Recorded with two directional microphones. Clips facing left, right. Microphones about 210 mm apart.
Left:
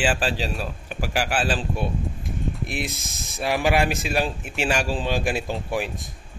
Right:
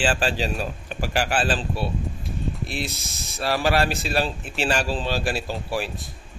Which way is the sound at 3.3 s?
15° left (ahead or behind).